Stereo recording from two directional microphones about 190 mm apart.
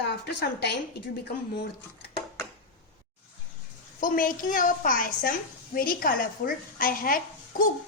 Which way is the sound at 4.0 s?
45° left (ahead or behind).